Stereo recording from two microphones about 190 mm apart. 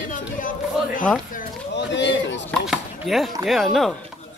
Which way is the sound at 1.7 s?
70° left (ahead or behind).